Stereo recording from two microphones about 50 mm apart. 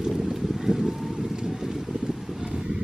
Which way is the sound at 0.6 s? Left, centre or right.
Centre.